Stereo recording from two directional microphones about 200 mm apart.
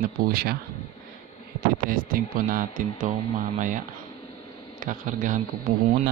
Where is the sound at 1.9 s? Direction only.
45° right (ahead or behind).